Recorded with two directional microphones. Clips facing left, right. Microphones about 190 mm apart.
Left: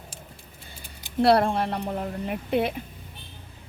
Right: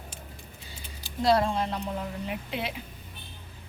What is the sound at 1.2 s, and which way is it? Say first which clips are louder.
Speech: left 4 dB; 65° left (ahead or behind).